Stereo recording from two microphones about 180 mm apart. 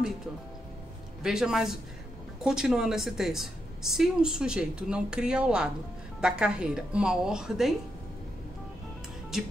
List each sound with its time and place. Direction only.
1.2 s a woman's voice: 5° right (ahead or behind)